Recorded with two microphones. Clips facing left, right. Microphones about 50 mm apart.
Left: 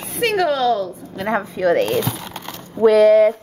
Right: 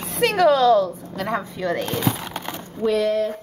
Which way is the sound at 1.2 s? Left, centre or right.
Left.